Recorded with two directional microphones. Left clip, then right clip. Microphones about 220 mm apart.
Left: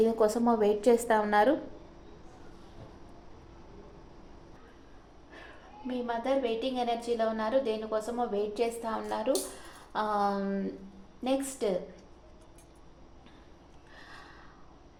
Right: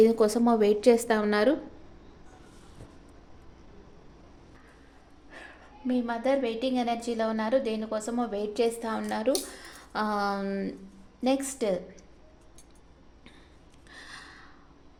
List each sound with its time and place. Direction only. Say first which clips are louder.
0.0 s a woman's voice: right 4 dB; 40° right (ahead or behind)
5.9 s a woman's voice: right 3 dB; 50° right (ahead or behind)